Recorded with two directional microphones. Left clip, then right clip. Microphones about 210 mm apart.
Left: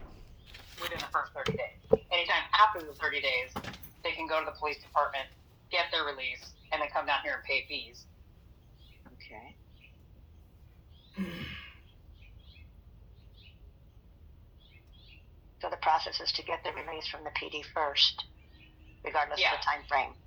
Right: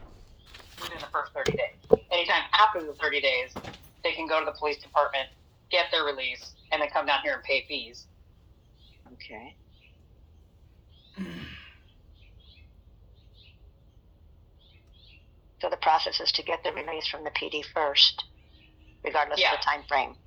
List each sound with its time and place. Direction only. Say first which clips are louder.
1.0 s a sound: right 3 dB; 20° right (ahead or behind)
1.4 s a sound: right 6 dB; 35° right (ahead or behind)
4.0 s a woman's voice: right 5 dB; 30° right (ahead or behind)
9.2 s speech: right 6 dB; 35° right (ahead or behind)
11.1 s sigh: even; 15° right (ahead or behind)
15.6 s speech: right 5 dB; 30° right (ahead or behind)